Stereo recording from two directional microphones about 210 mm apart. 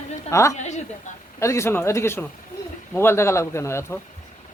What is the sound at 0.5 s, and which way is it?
Speech, 35° left (ahead or behind).